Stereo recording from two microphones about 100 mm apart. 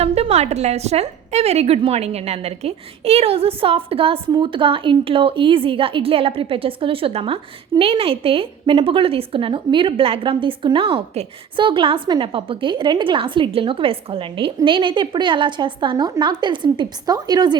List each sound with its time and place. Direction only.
0.0 s a woman's voice: 90° right
11.5 s a woman's voice: 55° right (ahead or behind)